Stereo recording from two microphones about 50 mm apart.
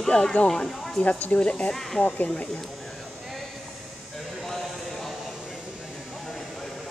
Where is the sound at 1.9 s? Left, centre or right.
Left.